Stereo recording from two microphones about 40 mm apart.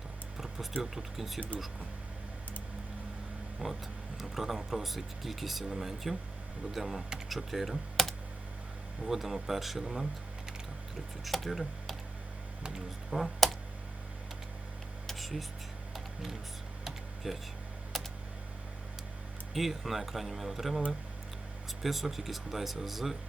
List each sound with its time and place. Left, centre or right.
0.3 s music: centre
0.8 s speech: centre
3.6 s speech: right
4.2 s speech: centre
11.3 s speech: centre
13.1 s speech: centre
15.0 s a sound: centre
17.2 s speech: centre
17.9 s a sound: centre
19.5 s speech: centre
21.8 s speech: centre